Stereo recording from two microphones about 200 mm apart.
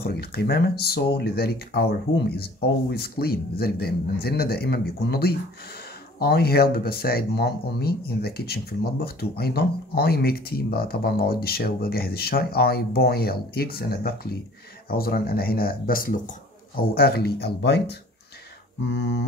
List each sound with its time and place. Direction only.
0.0 s speech: 50° left (ahead or behind)
18.9 s mantra: 65° left (ahead or behind)